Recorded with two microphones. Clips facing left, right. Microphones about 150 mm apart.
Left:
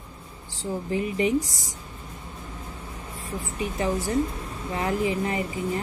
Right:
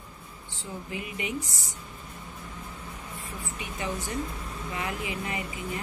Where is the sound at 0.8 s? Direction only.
35° left (ahead or behind).